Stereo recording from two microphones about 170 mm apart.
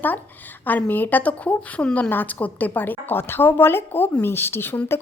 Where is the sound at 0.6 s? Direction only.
10° left (ahead or behind).